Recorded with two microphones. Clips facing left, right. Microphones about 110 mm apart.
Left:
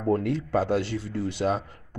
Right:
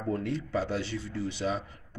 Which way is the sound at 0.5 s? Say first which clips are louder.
Left 8 dB; 85° left.